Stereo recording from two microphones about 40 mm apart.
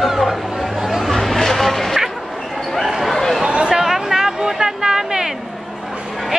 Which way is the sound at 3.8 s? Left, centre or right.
Centre.